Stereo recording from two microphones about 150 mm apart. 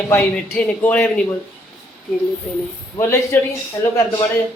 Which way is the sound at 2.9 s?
15° left (ahead or behind).